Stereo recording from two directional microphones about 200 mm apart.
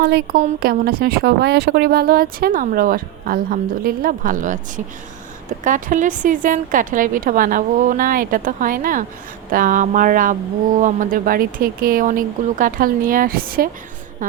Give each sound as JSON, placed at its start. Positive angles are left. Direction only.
{"t": 0.0, "sound": "speech", "side_deg": -55}